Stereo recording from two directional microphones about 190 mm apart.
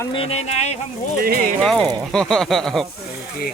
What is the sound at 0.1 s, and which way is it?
Speech, 30° left (ahead or behind).